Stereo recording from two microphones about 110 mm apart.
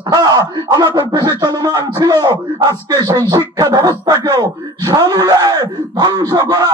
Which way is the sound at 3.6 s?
35° right (ahead or behind).